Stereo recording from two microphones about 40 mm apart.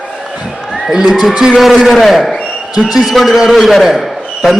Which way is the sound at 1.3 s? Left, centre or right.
Centre.